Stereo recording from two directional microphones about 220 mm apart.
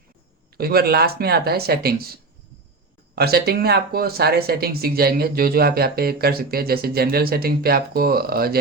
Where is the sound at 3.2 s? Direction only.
45° right (ahead or behind).